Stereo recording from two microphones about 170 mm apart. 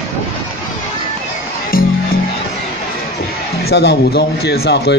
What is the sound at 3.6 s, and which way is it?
Speech, 80° left.